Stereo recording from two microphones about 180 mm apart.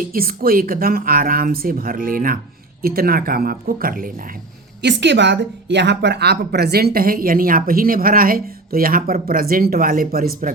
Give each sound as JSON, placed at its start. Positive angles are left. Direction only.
{"t": 0.1, "sound": "a woman's voice", "side_deg": -55}
{"t": 4.8, "sound": "a woman's voice", "side_deg": -70}